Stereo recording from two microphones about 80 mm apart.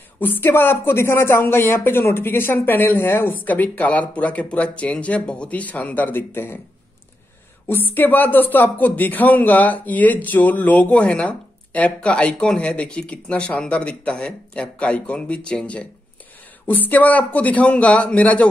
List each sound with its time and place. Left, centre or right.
0.2 s speech: left
7.9 s speech: left